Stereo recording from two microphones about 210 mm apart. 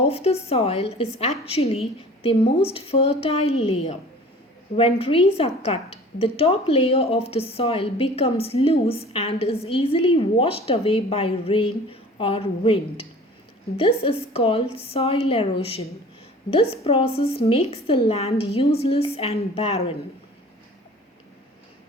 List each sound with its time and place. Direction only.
0.0 s a woman's voice: 30° left (ahead or behind)